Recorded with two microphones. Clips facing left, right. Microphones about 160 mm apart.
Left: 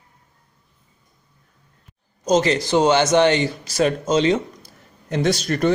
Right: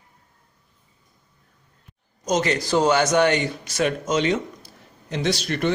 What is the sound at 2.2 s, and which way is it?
Speech, 30° left (ahead or behind).